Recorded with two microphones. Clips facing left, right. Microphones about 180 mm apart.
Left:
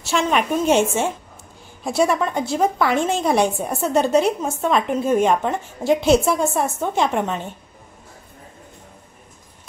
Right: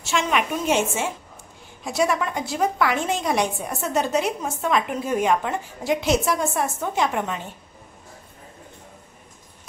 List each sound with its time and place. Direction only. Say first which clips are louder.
0.0 s a woman's voice: left 3 dB; 35° left (ahead or behind)